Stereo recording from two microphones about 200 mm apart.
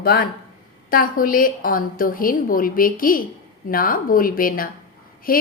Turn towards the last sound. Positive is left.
turn(degrees=45)  # may be behind; listen again after turning